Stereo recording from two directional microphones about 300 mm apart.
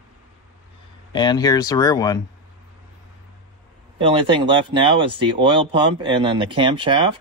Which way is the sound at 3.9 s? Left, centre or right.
Centre.